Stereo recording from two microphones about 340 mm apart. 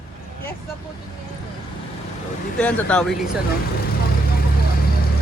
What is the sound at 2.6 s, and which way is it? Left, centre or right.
Speech, centre.